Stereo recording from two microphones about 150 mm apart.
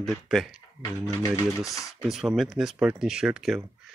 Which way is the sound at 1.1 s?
20° left (ahead or behind).